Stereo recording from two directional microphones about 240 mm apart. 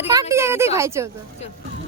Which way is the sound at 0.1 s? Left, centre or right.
Centre.